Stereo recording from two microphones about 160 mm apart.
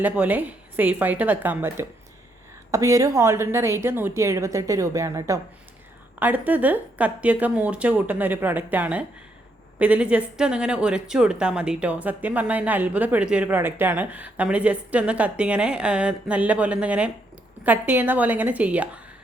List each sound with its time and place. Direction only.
0.0 s a woman's voice: 10° right (ahead or behind)